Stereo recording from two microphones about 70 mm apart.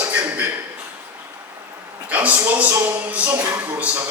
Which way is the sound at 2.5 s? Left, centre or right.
Right.